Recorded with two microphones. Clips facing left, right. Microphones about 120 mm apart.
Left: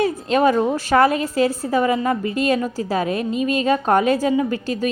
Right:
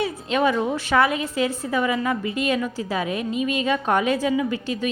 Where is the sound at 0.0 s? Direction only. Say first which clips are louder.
Left 5 dB; 40° left (ahead or behind).